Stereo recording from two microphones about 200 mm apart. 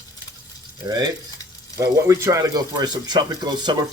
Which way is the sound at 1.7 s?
15° right (ahead or behind).